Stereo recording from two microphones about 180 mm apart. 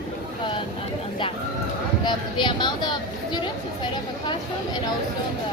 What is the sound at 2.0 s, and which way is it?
Speech, 25° left (ahead or behind).